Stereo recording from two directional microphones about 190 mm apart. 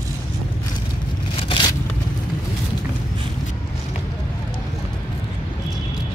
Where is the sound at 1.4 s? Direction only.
25° left (ahead or behind).